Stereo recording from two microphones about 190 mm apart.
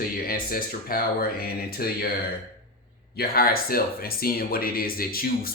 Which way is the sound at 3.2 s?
50° left (ahead or behind).